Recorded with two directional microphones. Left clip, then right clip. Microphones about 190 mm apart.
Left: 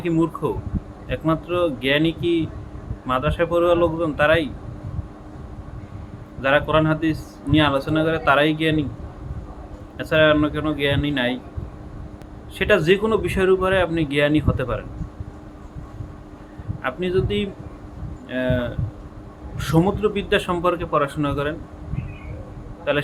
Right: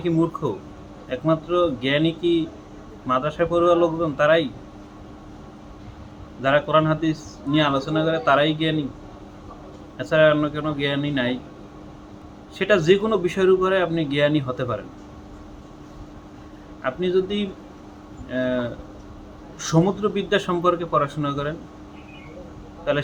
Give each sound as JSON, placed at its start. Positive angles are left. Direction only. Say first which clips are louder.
{"t": 0.0, "sound": "a man's voice", "louder": "left 1 dB", "side_deg": 5}
{"t": 6.4, "sound": "a man's voice", "louder": "even", "side_deg": 5}
{"t": 10.0, "sound": "a man's voice", "louder": "left 1 dB", "side_deg": 5}
{"t": 12.5, "sound": "a man's voice", "louder": "even", "side_deg": 5}
{"t": 16.8, "sound": "a man's voice", "louder": "right 1 dB", "side_deg": 5}
{"t": 22.9, "sound": "a man's voice", "louder": "left 1 dB", "side_deg": 5}